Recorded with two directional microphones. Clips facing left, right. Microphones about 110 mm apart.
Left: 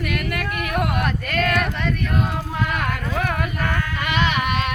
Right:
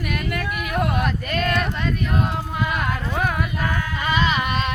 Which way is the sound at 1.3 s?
25° right (ahead or behind).